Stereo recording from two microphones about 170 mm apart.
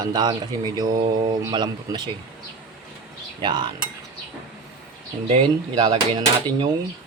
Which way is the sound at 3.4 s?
25° right (ahead or behind).